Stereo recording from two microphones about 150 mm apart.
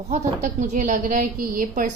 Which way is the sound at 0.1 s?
55° right (ahead or behind).